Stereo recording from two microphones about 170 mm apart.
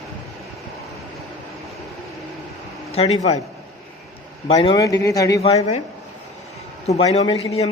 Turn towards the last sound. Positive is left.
turn(degrees=35)  # may be behind; listen again after turning